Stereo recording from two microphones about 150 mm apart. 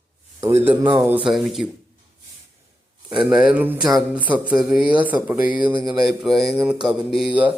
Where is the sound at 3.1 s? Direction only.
5° right (ahead or behind).